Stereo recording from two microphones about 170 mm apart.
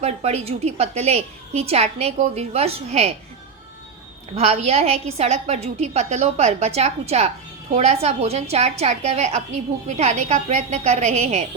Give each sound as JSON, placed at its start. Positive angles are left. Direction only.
{"t": 0.0, "sound": "a woman's voice", "side_deg": -40}
{"t": 4.4, "sound": "a woman's voice", "side_deg": -40}